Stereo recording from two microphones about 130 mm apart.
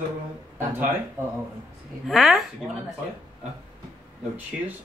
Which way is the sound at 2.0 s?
Centre (ahead or behind).